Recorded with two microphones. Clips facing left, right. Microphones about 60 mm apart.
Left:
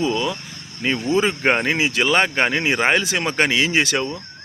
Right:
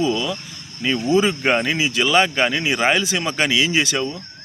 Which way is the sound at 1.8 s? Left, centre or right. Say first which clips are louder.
Right 1 dB; left.